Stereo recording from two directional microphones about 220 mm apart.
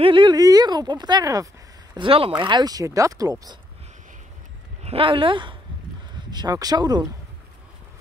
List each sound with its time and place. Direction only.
0.0 s speech: 20° right (ahead or behind)
4.8 s speech: 25° right (ahead or behind)